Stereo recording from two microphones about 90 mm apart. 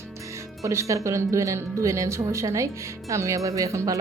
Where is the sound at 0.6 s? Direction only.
35° right (ahead or behind).